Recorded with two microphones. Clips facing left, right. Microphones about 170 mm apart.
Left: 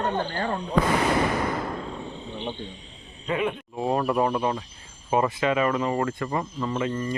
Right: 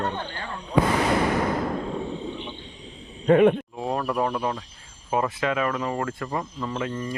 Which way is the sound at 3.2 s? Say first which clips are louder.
Right 10 dB; 50° right (ahead or behind).